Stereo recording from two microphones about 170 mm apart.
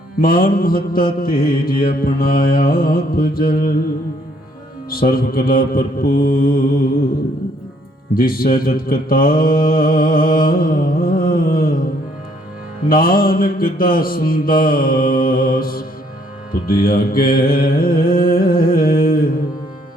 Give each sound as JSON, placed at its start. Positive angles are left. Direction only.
{"t": 0.2, "sound": "mantra", "side_deg": 60}
{"t": 4.9, "sound": "mantra", "side_deg": 60}
{"t": 8.1, "sound": "mantra", "side_deg": 60}
{"t": 12.9, "sound": "mantra", "side_deg": 60}
{"t": 16.5, "sound": "music", "side_deg": 60}